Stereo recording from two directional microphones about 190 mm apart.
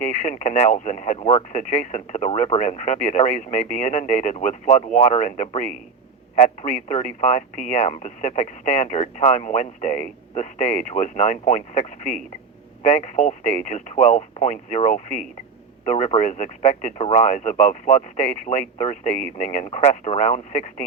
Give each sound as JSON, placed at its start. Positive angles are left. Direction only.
{"t": 0.0, "sound": "speech", "side_deg": 35}